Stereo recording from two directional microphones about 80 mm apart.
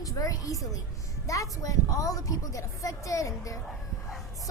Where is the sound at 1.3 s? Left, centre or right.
Left.